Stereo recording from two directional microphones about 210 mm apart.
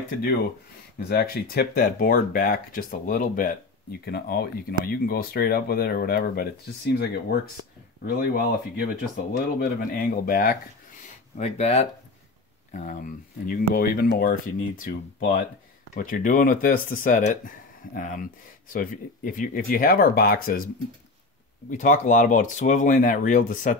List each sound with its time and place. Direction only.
1.0 s speech: 45° left (ahead or behind)
8.7 s speech: 45° left (ahead or behind)
11.3 s speech: 30° left (ahead or behind)
21.6 s speech: 35° left (ahead or behind)